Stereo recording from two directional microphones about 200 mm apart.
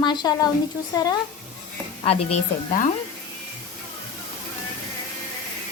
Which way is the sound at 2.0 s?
30° left (ahead or behind).